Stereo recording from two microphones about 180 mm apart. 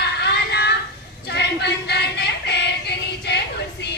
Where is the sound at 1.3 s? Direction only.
70° left (ahead or behind).